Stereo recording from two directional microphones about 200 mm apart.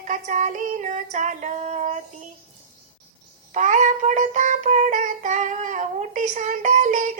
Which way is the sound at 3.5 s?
40° right (ahead or behind).